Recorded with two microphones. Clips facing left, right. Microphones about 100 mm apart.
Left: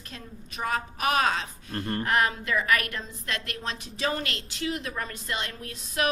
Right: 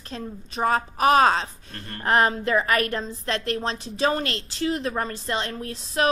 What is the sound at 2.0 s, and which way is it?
A woman's voice, 35° right (ahead or behind).